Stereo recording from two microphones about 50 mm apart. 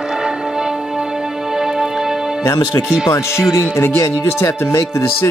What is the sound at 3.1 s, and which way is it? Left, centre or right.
Speech, left.